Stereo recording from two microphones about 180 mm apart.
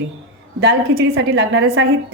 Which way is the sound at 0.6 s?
65° right (ahead or behind).